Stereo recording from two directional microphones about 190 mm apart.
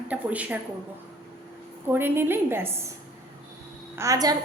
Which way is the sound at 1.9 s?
10° right (ahead or behind).